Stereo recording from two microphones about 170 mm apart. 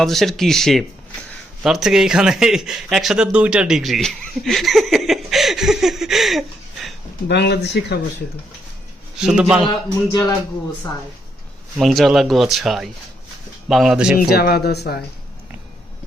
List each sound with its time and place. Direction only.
0.0 s speech: centre (ahead or behind)
7.3 s speech: 80° left
9.1 s speech: 5° right (ahead or behind)
9.6 s a man's voice: 25° left (ahead or behind)
11.8 s speech: centre (ahead or behind)
14.3 s speech: 65° left (ahead or behind)